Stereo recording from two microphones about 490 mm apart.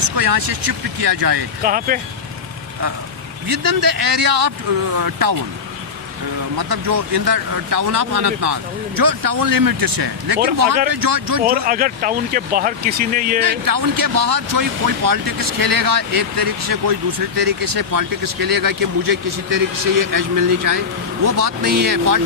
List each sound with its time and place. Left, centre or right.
0.2 s speech: right
1.6 s speech: centre
3.5 s speech: right
6.6 s speech: right
11.4 s speech: centre
13.4 s speech: right